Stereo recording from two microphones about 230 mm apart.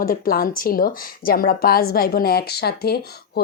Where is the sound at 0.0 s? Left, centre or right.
Left.